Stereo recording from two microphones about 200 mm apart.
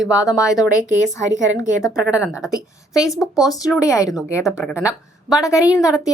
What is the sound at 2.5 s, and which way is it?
Speech, 15° left (ahead or behind).